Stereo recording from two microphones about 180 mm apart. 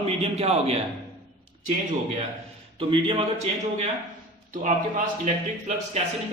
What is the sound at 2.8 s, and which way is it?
A man's voice, 30° right (ahead or behind).